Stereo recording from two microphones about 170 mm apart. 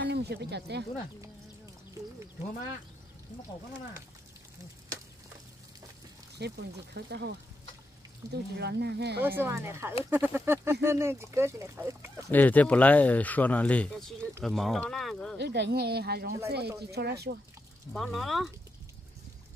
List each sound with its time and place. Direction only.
0.0 s speech: 75° right (ahead or behind)
6.3 s speech: 80° right
8.3 s a woman's voice: 75° right (ahead or behind)
9.4 s speech: 15° right (ahead or behind)
12.3 s speech: 10° left (ahead or behind)
15.3 s a woman's voice: 90° right; by 17.4 s 75° right (ahead or behind)
17.9 s speech: centre (ahead or behind)